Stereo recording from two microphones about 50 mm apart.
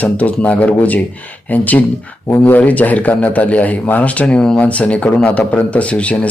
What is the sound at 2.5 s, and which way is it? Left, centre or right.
Speech, left.